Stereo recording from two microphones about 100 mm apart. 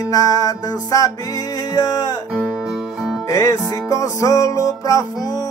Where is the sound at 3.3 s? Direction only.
30° left (ahead or behind).